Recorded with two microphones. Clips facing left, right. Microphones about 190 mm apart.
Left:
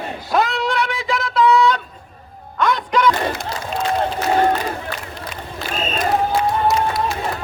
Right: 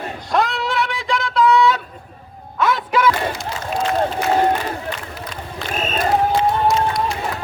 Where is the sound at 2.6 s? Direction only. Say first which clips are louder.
Even; 5° right (ahead or behind).